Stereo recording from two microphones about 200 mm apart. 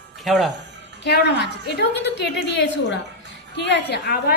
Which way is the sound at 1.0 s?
55° left (ahead or behind).